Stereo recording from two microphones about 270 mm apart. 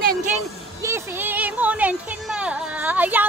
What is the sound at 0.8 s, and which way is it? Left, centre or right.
Speech, centre.